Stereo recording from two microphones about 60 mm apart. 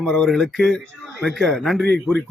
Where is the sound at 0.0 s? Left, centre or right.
Centre.